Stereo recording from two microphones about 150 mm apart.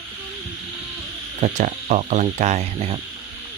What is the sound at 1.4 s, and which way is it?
Speech, 50° right (ahead or behind).